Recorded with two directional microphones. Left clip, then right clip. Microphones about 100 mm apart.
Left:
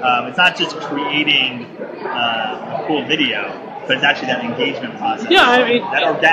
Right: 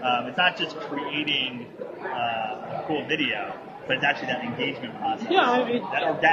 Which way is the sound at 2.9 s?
5° right (ahead or behind).